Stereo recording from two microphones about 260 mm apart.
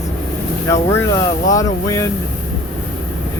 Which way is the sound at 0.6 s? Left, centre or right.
Centre.